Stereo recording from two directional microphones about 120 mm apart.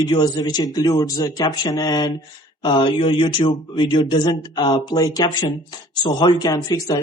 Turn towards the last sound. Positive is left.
turn(degrees=30)  # may be behind; listen again after turning